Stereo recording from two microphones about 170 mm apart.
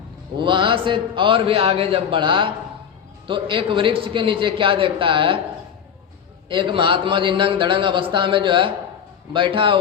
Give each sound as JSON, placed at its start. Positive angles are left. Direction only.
{"t": 0.3, "sound": "a man's voice", "side_deg": -30}
{"t": 6.5, "sound": "a man's voice", "side_deg": -30}